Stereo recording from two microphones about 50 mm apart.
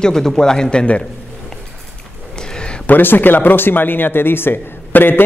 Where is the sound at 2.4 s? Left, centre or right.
Centre.